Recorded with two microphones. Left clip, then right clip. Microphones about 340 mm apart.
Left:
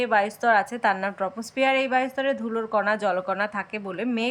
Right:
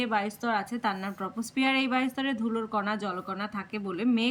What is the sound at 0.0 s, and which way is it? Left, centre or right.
Speech, centre.